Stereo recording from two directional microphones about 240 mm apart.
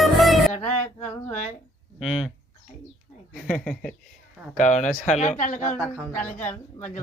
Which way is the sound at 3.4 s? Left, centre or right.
Centre.